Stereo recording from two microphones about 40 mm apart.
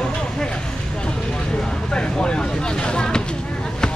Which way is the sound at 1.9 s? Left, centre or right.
Left.